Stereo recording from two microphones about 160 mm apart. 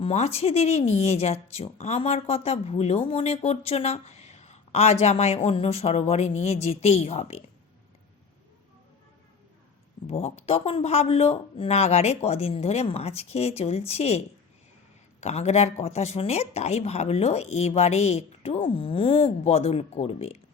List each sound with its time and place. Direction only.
0.0 s speech: 40° left (ahead or behind)
10.1 s speech: 40° left (ahead or behind)
15.2 s speech: 40° left (ahead or behind)